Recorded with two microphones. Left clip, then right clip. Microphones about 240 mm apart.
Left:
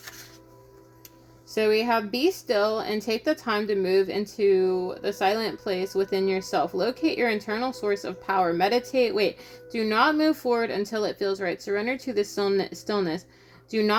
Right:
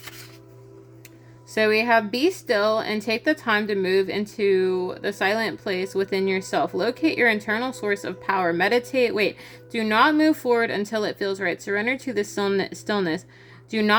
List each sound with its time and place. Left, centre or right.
1.5 s speech: right